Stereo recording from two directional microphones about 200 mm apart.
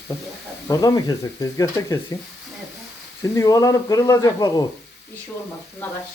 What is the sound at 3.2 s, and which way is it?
A man's voice, 15° left (ahead or behind).